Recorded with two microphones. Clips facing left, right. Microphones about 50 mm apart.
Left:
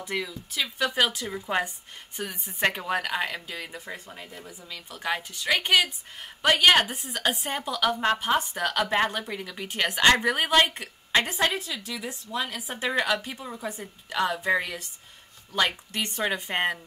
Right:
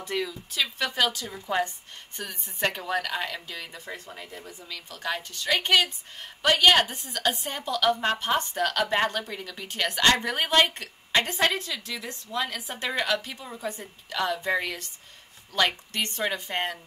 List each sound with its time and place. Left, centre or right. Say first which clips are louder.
0.0 s a woman's voice: right 1 dB; centre
4.1 s speech: right 1 dB; centre
4.6 s a woman's voice: left 2 dB; centre
16.4 s speech: left 3 dB; left